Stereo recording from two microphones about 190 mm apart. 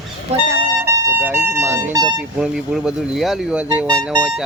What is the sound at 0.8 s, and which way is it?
Speech, 15° right (ahead or behind).